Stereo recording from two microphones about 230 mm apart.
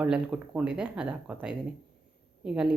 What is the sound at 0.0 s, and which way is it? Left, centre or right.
Speech, centre.